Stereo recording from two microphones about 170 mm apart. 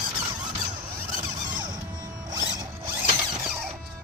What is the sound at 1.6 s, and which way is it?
Zipper, 25° right (ahead or behind).